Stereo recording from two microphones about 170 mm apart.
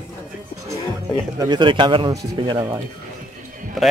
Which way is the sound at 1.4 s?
25° right (ahead or behind).